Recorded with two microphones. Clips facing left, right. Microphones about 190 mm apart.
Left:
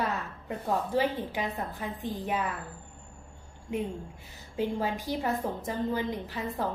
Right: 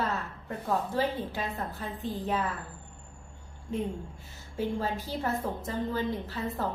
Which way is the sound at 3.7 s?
15° left (ahead or behind).